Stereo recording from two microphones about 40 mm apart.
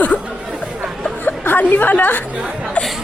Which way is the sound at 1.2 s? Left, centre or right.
Left.